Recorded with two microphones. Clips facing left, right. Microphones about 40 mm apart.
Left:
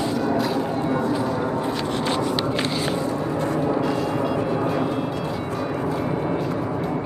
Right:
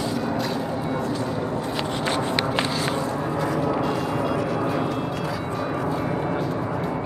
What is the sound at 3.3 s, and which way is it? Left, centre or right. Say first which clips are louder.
Vehicle: even; right.